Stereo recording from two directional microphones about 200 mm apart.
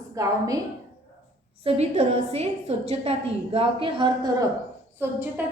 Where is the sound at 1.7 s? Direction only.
30° right (ahead or behind).